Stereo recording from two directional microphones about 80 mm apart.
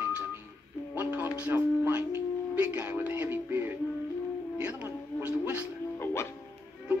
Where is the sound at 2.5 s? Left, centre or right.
Centre.